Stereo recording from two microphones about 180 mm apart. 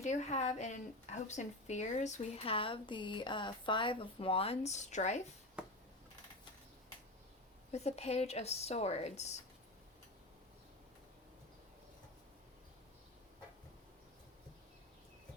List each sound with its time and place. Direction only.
0.0 s speech: 40° left (ahead or behind)
7.7 s speech: 35° left (ahead or behind)